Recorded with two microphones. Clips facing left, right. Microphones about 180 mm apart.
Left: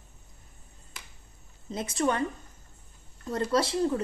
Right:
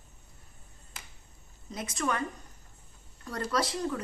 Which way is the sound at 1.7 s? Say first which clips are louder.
Left 5 dB; 30° left (ahead or behind).